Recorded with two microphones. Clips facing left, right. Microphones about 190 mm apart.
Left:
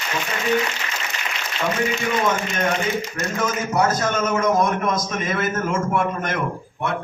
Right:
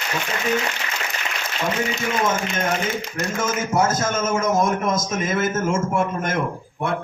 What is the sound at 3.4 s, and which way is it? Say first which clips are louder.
A man's voice: even; 25° right (ahead or behind).